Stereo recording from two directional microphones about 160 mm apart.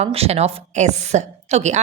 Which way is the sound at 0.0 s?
40° right (ahead or behind).